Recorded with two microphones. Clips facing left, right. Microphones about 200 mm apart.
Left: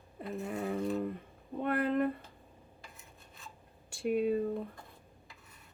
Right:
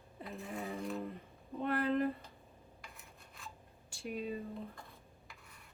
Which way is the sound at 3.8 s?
55° left (ahead or behind).